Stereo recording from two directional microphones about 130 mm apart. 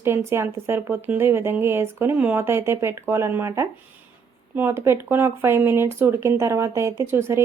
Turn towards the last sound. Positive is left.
turn(degrees=-20)  # may be behind; listen again after turning